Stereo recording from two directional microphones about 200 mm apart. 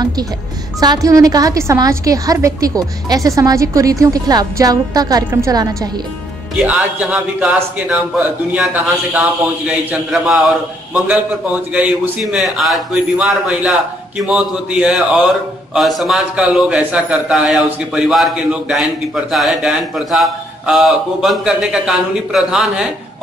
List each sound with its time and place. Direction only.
0.7 s a woman's voice: 20° right (ahead or behind); by 22.8 s centre (ahead or behind)